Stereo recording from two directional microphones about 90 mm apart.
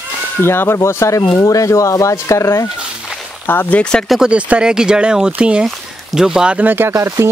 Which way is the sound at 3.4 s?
20° left (ahead or behind).